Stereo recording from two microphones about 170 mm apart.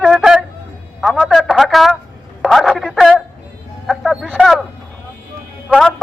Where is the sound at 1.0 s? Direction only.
Centre (ahead or behind).